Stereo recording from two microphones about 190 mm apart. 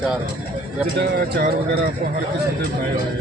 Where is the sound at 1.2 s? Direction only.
50° right (ahead or behind).